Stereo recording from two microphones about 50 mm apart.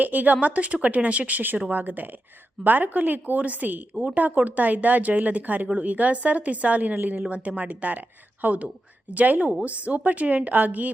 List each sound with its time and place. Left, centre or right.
0.0 s a woman's voice: right